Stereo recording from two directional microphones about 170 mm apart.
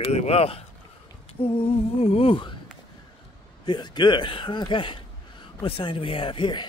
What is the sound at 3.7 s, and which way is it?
Speech, 25° left (ahead or behind).